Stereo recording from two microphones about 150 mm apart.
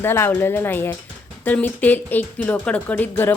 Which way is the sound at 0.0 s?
15° left (ahead or behind).